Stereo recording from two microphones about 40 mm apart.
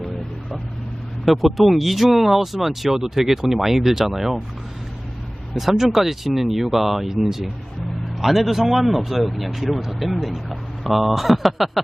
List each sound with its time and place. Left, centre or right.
1.2 s speech: centre
5.5 s speech: centre